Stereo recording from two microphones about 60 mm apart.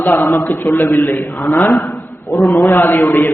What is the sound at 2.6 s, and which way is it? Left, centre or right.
Speech, left.